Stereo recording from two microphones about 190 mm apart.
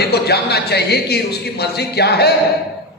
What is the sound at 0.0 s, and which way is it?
A man's voice, 60° left (ahead or behind).